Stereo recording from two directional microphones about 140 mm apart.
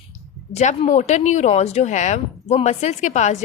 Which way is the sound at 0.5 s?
55° left (ahead or behind).